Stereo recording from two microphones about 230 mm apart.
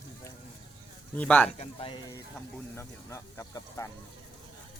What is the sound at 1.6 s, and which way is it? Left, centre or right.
Speech, left.